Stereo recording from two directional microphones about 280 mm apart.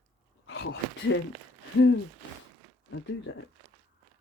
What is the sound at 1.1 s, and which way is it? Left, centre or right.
Speech, left.